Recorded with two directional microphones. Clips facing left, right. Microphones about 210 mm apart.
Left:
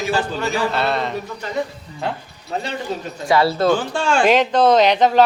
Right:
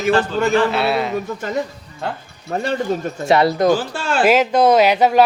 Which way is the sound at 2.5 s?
55° right (ahead or behind).